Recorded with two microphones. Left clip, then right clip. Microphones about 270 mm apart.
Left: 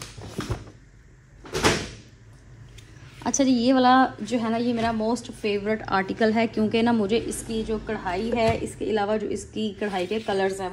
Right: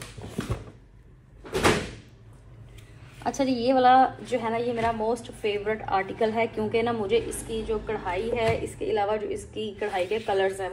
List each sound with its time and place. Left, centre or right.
3.3 s a woman's voice: left